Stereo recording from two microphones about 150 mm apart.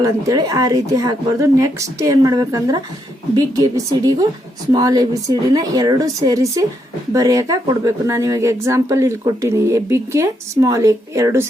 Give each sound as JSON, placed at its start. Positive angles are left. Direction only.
{"t": 0.0, "sound": "a woman's voice", "side_deg": -25}